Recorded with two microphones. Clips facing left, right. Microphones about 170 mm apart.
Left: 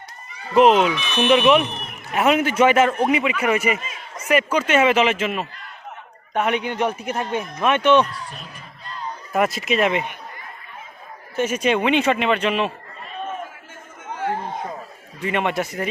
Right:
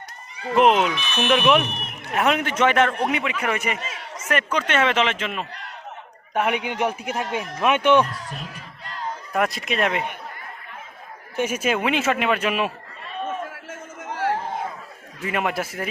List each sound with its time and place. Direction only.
0.5 s speech: centre (ahead or behind)
6.3 s a man's voice: 10° right (ahead or behind)
8.4 s music: 90° right
9.3 s speech: centre (ahead or behind)
11.3 s speech: 10° right (ahead or behind)
13.7 s a sound: 80° right
15.2 s speech: centre (ahead or behind)